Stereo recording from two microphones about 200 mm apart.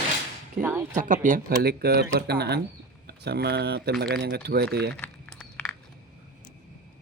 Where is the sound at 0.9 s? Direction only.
40° right (ahead or behind); by 4.9 s 55° right (ahead or behind).